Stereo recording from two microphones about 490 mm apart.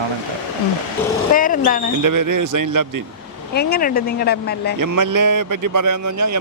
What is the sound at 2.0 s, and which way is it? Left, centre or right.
A man's voice, right.